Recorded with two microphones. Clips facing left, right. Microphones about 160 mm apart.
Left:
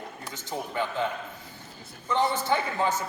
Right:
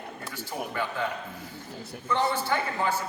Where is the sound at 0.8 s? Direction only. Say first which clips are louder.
Left 2 dB; 20° left (ahead or behind).